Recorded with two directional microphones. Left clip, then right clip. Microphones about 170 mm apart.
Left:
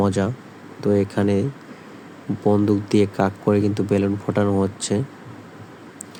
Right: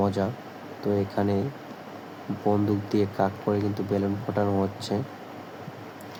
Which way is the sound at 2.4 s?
40° left (ahead or behind).